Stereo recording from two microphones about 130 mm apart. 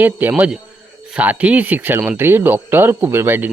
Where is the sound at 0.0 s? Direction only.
15° right (ahead or behind).